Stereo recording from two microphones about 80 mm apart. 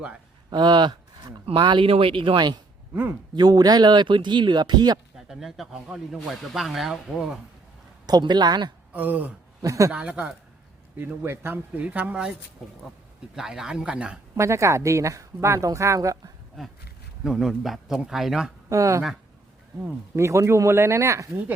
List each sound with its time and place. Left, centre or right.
0.5 s speech: right
3.3 s speech: right
5.1 s speech: centre
8.0 s speech: right
8.9 s speech: right
9.6 s speech: right
9.9 s speech: centre
13.3 s speech: centre
14.3 s a woman's voice: right
16.6 s speech: centre
18.7 s a woman's voice: right
20.1 s a woman's voice: right